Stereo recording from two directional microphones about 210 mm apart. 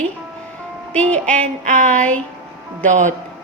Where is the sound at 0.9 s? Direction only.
5° left (ahead or behind).